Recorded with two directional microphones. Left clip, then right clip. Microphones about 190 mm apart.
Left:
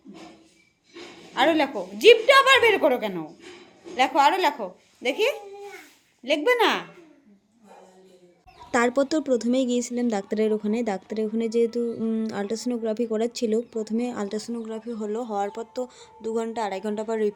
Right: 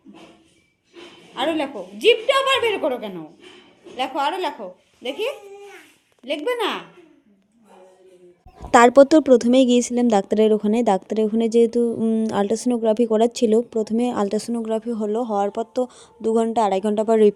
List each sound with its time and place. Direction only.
1.4 s a woman's voice: 5° left (ahead or behind)
8.7 s speech: 45° right (ahead or behind)